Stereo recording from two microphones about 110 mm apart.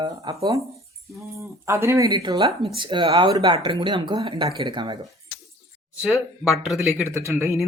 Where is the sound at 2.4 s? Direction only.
55° right (ahead or behind).